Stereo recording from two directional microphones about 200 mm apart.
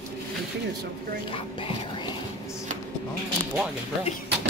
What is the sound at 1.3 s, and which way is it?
Speech, 25° left (ahead or behind).